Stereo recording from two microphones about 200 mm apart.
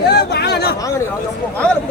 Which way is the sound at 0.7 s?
15° left (ahead or behind).